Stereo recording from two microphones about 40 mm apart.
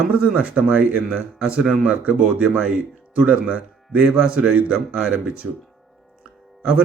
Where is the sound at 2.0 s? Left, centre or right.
Right.